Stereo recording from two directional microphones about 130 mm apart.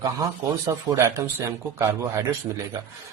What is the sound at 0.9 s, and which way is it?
A man's voice, 20° right (ahead or behind).